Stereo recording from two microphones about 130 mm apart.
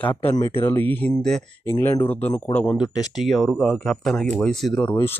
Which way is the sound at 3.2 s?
Centre (ahead or behind).